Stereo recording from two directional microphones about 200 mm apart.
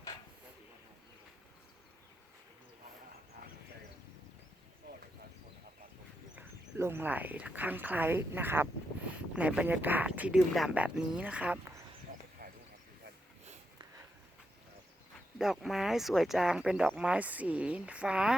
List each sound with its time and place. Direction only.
6.3 s speech: 10° right (ahead or behind)
12.1 s a sound: 40° right (ahead or behind)
15.4 s speech: centre (ahead or behind)